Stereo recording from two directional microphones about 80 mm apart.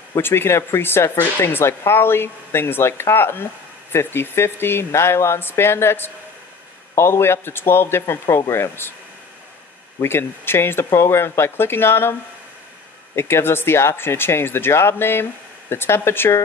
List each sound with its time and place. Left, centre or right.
0.1 s speech: left
9.9 s speech: left